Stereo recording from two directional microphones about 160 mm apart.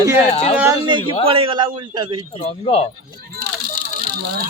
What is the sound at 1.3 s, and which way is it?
Speech, 35° right (ahead or behind).